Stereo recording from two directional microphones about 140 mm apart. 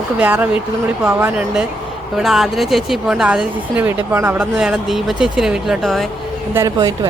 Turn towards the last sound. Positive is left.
turn(degrees=-25)  # may be behind; listen again after turning